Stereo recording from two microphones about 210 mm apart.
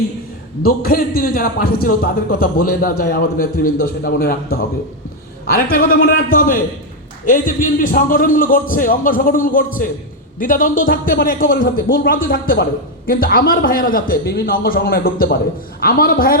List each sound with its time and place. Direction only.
0.6 s a man's voice: 45° left (ahead or behind)
5.5 s a man's voice: 45° left (ahead or behind)